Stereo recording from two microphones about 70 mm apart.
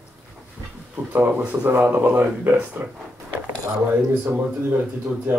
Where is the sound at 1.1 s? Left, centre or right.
Right.